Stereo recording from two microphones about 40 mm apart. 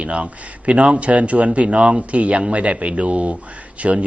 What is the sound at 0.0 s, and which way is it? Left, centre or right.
A man's voice, right.